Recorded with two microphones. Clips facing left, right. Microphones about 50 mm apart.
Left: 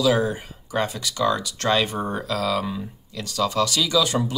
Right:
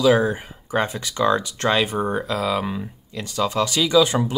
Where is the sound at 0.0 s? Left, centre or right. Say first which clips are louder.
Right 3 dB; right.